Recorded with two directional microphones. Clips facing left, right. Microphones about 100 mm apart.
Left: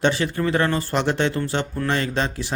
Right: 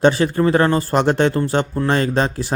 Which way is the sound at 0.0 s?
40° right (ahead or behind).